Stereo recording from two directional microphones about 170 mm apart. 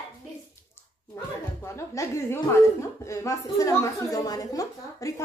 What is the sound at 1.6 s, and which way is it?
A woman's voice, 15° left (ahead or behind).